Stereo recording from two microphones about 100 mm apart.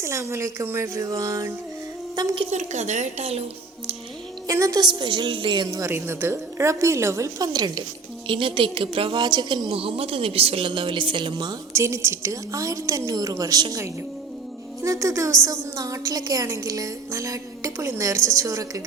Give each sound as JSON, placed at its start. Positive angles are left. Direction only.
{"t": 0.0, "sound": "a woman's voice", "side_deg": -30}
{"t": 3.2, "sound": "speech", "side_deg": -90}
{"t": 4.4, "sound": "a woman's voice", "side_deg": -35}
{"t": 5.6, "sound": "a woman's voice", "side_deg": -35}
{"t": 5.9, "sound": "a woman's voice", "side_deg": -25}
{"t": 8.3, "sound": "a woman's voice", "side_deg": -60}
{"t": 11.7, "sound": "a woman's voice", "side_deg": -30}